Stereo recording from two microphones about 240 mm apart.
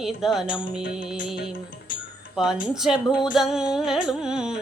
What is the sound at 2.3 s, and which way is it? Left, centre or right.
Wind chime, centre.